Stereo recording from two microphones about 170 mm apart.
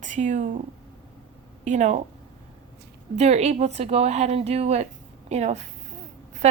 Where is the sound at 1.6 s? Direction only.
45° right (ahead or behind).